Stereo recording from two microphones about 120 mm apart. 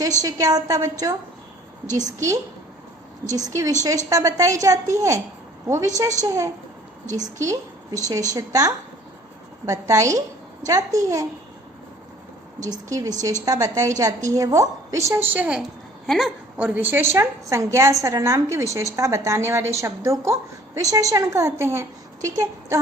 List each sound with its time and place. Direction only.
0.2 s a woman's voice: 30° right (ahead or behind)
12.5 s a woman's voice: 90° right
12.9 s a woman's voice: 25° right (ahead or behind); by 15.6 s 10° right (ahead or behind)
16.0 s a woman's voice: centre (ahead or behind)
16.6 s a woman's voice: 10° right (ahead or behind)